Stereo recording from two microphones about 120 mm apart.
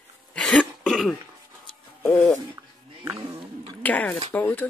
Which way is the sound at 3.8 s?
15° left (ahead or behind).